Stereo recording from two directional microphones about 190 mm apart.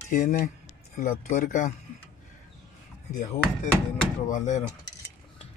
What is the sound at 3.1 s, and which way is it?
Speech, 40° left (ahead or behind).